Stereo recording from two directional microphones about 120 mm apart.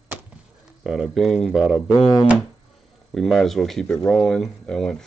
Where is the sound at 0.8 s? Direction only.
5° right (ahead or behind).